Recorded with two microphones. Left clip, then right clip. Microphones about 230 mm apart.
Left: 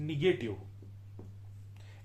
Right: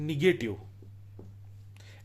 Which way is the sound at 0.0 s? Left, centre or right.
Right.